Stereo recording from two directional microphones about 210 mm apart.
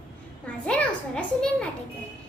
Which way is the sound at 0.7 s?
5° left (ahead or behind).